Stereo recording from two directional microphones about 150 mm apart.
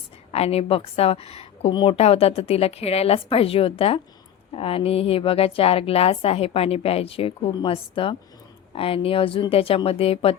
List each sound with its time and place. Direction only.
0.3 s a woman's voice: 40° left (ahead or behind)